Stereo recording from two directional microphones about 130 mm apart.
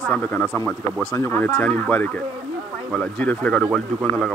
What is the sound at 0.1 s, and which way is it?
A man's voice, 15° left (ahead or behind).